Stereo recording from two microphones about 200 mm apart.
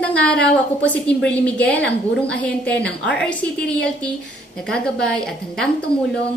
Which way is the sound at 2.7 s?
55° left (ahead or behind).